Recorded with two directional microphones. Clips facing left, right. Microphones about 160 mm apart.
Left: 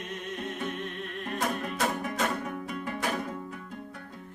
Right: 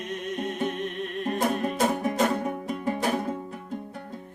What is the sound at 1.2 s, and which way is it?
Music, 25° right (ahead or behind).